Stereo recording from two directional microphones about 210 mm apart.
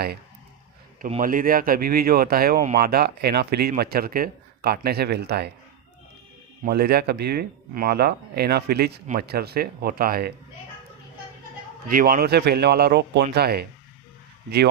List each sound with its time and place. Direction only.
1.0 s speech: 40° right (ahead or behind)
6.7 s speech: 50° right (ahead or behind)
11.9 s speech: 45° right (ahead or behind)